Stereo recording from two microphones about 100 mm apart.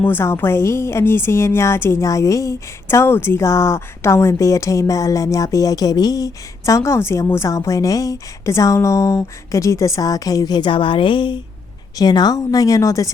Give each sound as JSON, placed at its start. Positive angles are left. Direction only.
{"t": 0.0, "sound": "a woman's voice", "side_deg": 20}
{"t": 11.9, "sound": "a woman's voice", "side_deg": 45}